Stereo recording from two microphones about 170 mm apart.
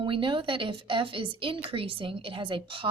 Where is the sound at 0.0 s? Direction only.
30° right (ahead or behind).